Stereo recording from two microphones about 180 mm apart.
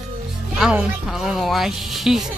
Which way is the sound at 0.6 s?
Centre (ahead or behind).